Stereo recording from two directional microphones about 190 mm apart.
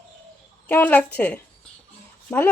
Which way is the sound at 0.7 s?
10° left (ahead or behind).